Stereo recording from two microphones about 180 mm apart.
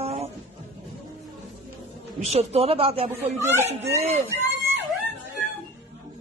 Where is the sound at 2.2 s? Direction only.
35° right (ahead or behind).